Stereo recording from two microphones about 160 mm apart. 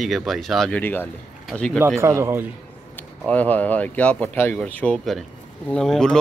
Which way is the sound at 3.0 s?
10° left (ahead or behind).